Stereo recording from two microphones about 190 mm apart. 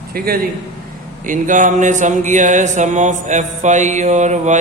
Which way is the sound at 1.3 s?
40° right (ahead or behind).